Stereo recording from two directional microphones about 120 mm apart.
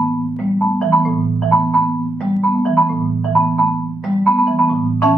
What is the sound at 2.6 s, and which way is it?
Marimba, centre (ahead or behind).